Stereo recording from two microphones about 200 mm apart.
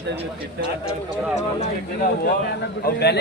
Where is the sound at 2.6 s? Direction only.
55° left (ahead or behind).